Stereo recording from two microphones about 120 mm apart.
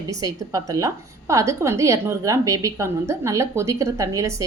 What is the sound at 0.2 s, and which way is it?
A woman's voice, 30° right (ahead or behind).